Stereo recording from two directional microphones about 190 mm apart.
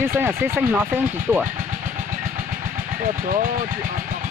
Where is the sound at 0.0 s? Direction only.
10° right (ahead or behind).